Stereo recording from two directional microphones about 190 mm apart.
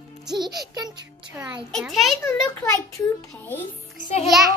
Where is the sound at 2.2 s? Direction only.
15° left (ahead or behind).